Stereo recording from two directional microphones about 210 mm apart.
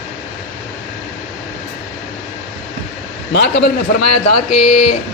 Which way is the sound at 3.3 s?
55° left (ahead or behind).